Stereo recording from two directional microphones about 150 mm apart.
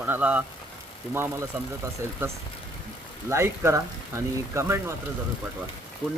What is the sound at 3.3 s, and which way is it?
Speech, 20° right (ahead or behind).